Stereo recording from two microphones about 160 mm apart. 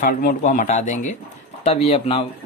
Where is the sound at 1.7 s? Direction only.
40° left (ahead or behind).